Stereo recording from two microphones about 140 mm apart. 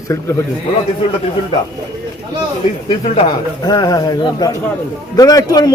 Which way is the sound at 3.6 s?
25° left (ahead or behind).